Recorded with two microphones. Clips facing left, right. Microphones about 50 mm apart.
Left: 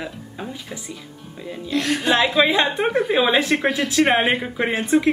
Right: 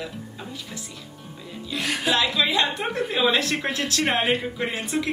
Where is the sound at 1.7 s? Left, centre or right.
Centre.